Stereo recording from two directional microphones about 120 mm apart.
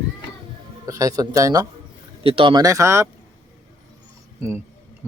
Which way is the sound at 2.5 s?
30° right (ahead or behind).